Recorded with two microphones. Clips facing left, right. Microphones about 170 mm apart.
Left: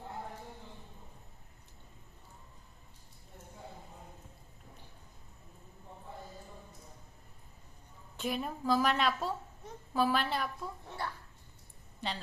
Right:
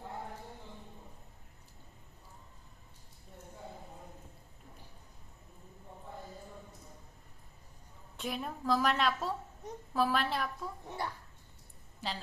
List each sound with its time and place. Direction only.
8.1 s a woman's voice: centre (ahead or behind)
10.8 s babbling: 15° right (ahead or behind)
11.9 s a woman's voice: centre (ahead or behind)